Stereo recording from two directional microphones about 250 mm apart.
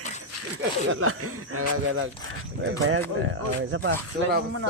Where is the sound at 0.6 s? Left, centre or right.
Right.